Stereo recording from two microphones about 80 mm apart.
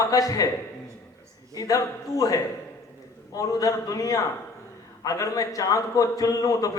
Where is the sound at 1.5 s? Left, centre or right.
Left.